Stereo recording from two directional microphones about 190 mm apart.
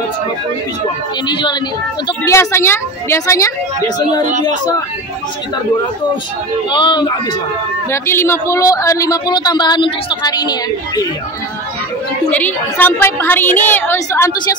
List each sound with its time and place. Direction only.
1.2 s speech: 25° left (ahead or behind)
6.7 s speech: 25° left (ahead or behind)
7.9 s speech: 15° left (ahead or behind)
12.3 s speech: 10° left (ahead or behind)